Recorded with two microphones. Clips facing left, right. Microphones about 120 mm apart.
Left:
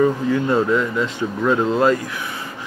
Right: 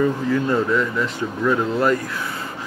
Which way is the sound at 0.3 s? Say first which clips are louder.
Left 2 dB; 20° left (ahead or behind).